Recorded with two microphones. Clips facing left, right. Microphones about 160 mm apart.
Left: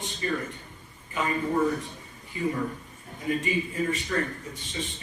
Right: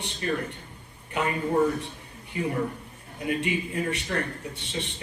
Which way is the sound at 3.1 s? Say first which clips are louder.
Even; 70° right (ahead or behind).